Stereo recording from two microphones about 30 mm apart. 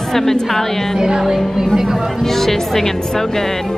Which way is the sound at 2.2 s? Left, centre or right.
Centre.